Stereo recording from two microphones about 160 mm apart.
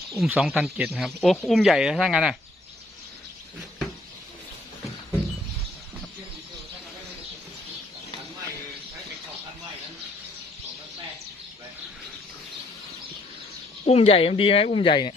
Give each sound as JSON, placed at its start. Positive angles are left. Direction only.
{"t": 0.1, "sound": "speech", "side_deg": 0}
{"t": 13.8, "sound": "speech", "side_deg": 40}